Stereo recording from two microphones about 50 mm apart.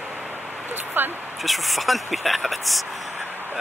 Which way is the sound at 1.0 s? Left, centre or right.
Right.